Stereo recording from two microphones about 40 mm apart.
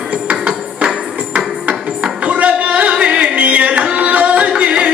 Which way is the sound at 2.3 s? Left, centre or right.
Right.